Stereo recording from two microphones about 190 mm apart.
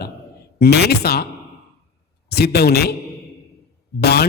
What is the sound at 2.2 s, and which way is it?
Speech, 60° left (ahead or behind).